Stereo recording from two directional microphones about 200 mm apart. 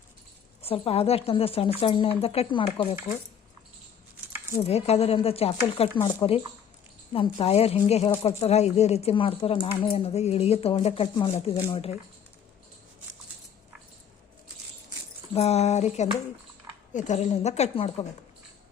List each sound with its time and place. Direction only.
0.6 s speech: 30° left (ahead or behind)
4.6 s speech: 30° left (ahead or behind)
15.3 s speech: 30° left (ahead or behind)